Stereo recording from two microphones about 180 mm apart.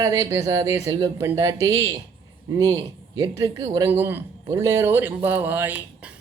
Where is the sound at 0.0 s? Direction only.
15° right (ahead or behind).